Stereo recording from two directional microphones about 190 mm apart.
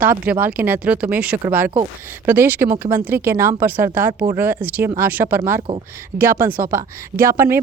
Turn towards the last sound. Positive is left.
turn(degrees=-15)  # may be behind; listen again after turning